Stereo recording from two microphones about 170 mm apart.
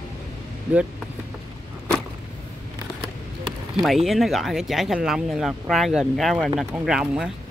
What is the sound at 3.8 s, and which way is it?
Speech, centre (ahead or behind).